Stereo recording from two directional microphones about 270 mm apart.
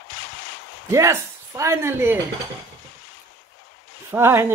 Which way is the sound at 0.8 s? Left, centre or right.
Centre.